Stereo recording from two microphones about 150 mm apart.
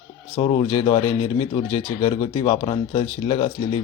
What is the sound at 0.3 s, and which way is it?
A man's voice, 40° left (ahead or behind).